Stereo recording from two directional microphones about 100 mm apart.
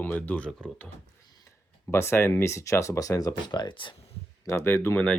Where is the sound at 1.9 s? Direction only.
25° left (ahead or behind).